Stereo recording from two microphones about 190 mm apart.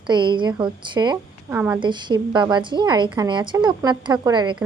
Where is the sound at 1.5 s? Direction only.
10° right (ahead or behind).